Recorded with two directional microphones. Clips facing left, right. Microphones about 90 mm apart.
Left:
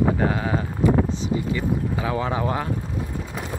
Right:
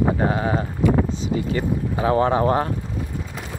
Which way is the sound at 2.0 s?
40° right (ahead or behind).